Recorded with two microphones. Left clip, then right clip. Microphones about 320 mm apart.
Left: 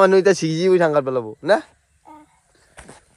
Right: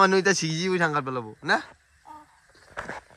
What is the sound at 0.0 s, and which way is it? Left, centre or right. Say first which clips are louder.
A man's voice: left 6 dB; centre.